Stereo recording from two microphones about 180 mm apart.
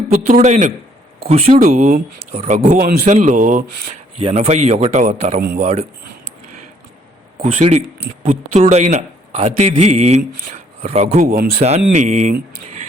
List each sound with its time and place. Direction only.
0.1 s a man's voice: 45° right (ahead or behind)
1.6 s a man's voice: 45° right (ahead or behind)
7.4 s a man's voice: 40° right (ahead or behind)